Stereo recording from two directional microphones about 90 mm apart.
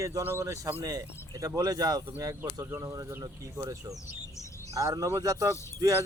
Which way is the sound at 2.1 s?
30° right (ahead or behind).